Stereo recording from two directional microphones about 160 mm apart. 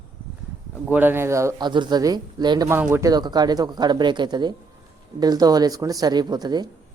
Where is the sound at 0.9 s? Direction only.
10° right (ahead or behind).